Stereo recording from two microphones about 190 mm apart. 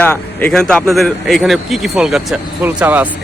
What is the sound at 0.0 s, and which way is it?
A man's voice, 10° left (ahead or behind).